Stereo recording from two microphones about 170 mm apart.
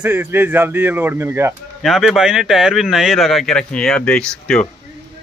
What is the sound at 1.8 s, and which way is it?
Speech, centre (ahead or behind).